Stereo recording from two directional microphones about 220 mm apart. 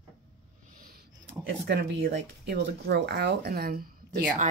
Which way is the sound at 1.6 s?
50° right (ahead or behind).